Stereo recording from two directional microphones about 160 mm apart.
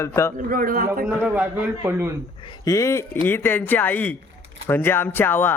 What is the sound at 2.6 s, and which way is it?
Speech, 20° left (ahead or behind).